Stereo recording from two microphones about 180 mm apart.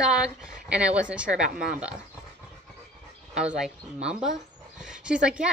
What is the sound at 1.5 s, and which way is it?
Speech, 55° right (ahead or behind).